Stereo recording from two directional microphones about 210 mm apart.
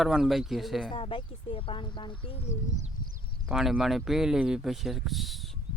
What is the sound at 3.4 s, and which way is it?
Speech, centre (ahead or behind).